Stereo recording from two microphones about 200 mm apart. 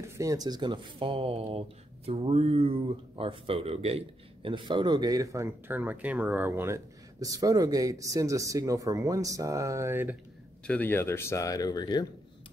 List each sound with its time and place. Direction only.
0.1 s speech: 15° right (ahead or behind)
10.7 s speech: 10° left (ahead or behind)